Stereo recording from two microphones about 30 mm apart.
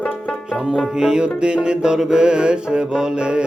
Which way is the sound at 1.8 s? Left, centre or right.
Right.